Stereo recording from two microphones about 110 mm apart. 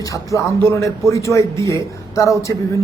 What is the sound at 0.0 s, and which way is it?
Speech, 30° left (ahead or behind).